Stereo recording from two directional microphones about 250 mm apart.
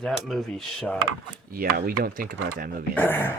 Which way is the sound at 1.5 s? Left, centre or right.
Right.